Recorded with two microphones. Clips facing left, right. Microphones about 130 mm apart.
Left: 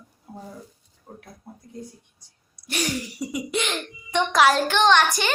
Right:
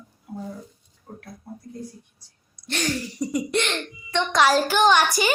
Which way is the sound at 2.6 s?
10° left (ahead or behind).